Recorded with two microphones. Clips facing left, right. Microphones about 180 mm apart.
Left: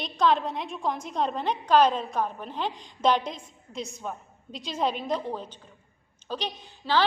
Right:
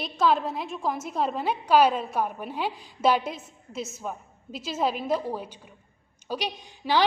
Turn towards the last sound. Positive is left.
turn(degrees=-15)  # may be behind; listen again after turning